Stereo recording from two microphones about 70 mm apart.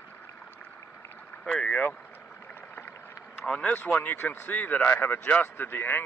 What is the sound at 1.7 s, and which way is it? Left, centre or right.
Speech, left.